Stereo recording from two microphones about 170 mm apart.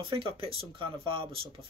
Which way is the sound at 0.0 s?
30° right (ahead or behind).